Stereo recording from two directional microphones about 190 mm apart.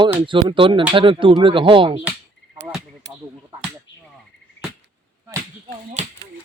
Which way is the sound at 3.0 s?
70° right (ahead or behind).